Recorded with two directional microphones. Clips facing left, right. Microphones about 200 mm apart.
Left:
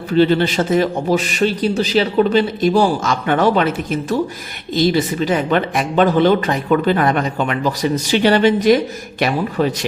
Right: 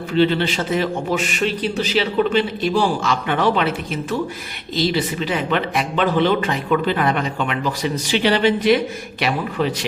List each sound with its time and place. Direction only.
0.1 s speech: 40° left (ahead or behind)